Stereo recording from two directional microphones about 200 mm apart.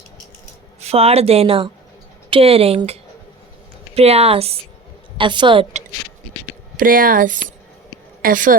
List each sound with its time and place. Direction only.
0.9 s a woman's voice: 30° right (ahead or behind)
6.7 s speech: 45° right (ahead or behind)